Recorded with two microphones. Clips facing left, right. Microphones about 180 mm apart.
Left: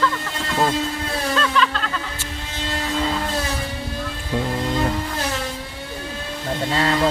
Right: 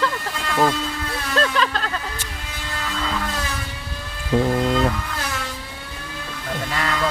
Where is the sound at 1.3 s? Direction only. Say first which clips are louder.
Right 2 dB; 40° right (ahead or behind).